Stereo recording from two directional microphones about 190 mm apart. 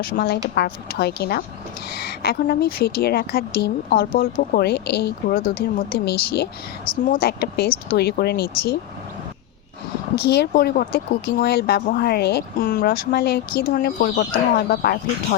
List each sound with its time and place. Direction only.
0.0 s a woman's voice: 50° left (ahead or behind)
10.2 s speech: 60° left (ahead or behind)